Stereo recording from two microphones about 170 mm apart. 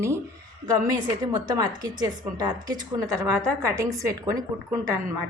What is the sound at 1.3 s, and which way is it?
A woman's voice, 20° right (ahead or behind).